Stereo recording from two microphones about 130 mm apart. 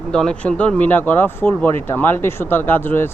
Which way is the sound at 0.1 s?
5° left (ahead or behind).